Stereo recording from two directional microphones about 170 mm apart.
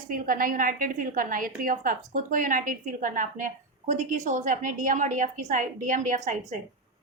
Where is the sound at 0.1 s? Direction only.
55° right (ahead or behind).